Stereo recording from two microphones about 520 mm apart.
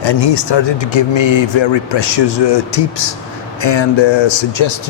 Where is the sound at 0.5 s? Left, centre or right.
Left.